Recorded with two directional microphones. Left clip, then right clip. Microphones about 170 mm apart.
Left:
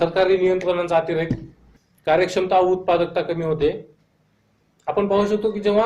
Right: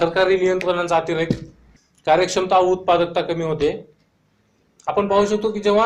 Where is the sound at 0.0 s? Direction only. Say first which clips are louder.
Right 1 dB; 15° right (ahead or behind).